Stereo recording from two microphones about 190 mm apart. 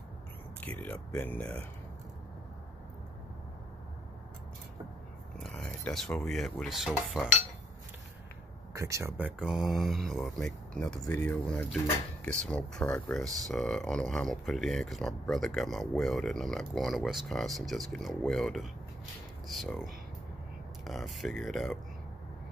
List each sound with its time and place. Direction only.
0.6 s speech: 10° left (ahead or behind)
5.4 s speech: 5° left (ahead or behind)
8.7 s speech: 15° right (ahead or behind); by 21.7 s centre (ahead or behind)